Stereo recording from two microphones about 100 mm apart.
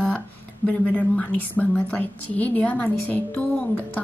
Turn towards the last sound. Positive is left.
turn(degrees=15)  # may be behind; listen again after turning